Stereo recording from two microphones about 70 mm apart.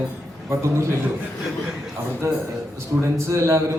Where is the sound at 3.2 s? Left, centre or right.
Right.